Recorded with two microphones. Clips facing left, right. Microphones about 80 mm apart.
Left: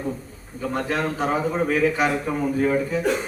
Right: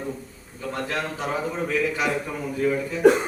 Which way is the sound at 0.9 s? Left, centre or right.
Left.